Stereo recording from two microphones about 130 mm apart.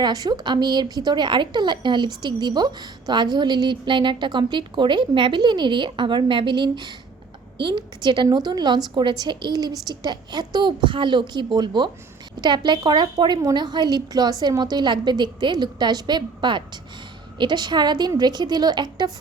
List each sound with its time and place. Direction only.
0.0 s a woman's voice: 30° right (ahead or behind)